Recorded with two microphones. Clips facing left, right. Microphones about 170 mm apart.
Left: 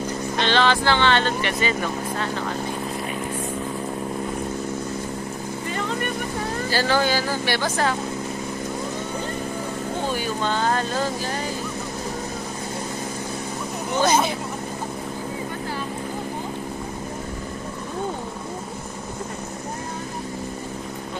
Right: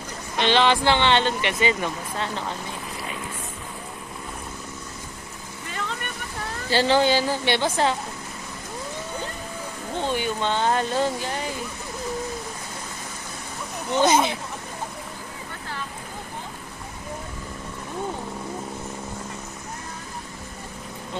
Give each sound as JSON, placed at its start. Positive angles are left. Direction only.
{"t": 0.4, "sound": "speech", "side_deg": -15}
{"t": 6.7, "sound": "speech", "side_deg": -25}
{"t": 10.1, "sound": "speech", "side_deg": -20}
{"t": 14.0, "sound": "speech", "side_deg": -20}